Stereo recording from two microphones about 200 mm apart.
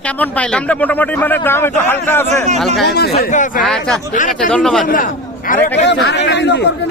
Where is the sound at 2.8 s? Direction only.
55° left (ahead or behind).